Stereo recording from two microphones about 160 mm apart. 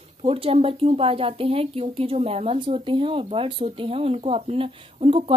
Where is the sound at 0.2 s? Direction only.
35° right (ahead or behind).